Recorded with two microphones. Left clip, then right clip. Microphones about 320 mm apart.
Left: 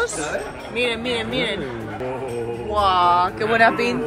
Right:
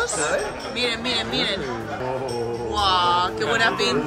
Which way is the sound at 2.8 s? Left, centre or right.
Left.